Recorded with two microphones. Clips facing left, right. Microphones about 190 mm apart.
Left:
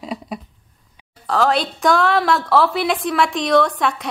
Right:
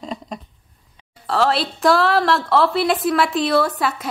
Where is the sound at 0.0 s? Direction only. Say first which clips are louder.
Left 2 dB; 5° left (ahead or behind).